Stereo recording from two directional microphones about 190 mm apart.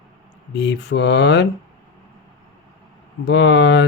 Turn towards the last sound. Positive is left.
turn(degrees=65)  # may be behind; listen again after turning